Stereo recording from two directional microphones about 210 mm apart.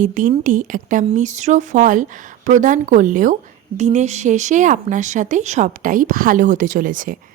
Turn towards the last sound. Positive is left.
turn(degrees=-40)  # may be behind; listen again after turning